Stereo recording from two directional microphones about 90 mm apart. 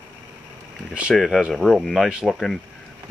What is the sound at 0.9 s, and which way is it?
Speech, 15° right (ahead or behind).